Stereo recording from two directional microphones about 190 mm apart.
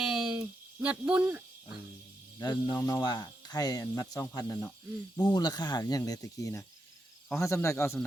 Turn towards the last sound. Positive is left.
turn(degrees=15)  # may be behind; listen again after turning